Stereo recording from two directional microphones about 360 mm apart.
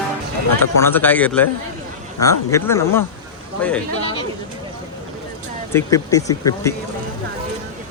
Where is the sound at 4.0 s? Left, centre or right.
Centre.